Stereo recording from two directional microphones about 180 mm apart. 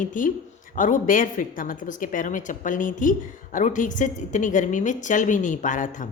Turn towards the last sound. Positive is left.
turn(degrees=45)  # may be behind; listen again after turning